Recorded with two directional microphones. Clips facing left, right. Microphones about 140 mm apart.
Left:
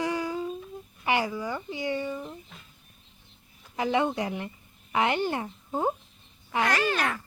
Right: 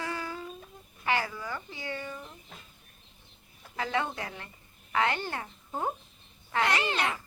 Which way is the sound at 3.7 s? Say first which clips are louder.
Left 6 dB; 15° left (ahead or behind).